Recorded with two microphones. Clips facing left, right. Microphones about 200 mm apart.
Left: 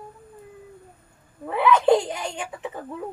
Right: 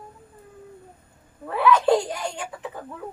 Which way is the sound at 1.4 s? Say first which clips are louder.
Left 1 dB; 20° left (ahead or behind).